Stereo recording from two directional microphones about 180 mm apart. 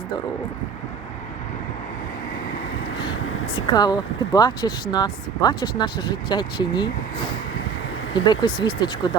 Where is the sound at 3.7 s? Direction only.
20° left (ahead or behind).